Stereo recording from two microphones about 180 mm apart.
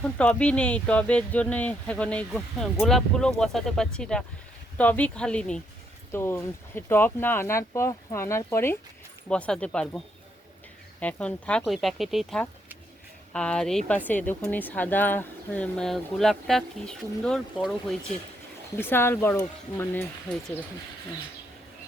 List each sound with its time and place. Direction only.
0.2 s speech: 5° left (ahead or behind)
11.0 s speech: 5° left (ahead or behind)
18.8 s speech: 10° left (ahead or behind)